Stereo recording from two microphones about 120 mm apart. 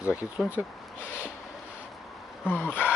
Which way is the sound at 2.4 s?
15° left (ahead or behind).